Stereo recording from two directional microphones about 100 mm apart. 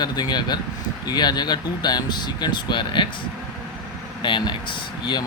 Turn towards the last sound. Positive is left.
turn(degrees=50)  # may be behind; listen again after turning